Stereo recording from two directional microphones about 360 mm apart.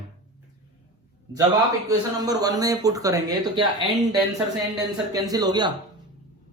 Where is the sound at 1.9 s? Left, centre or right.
Centre.